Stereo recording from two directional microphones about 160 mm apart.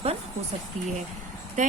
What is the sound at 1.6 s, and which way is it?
Speech, 50° right (ahead or behind).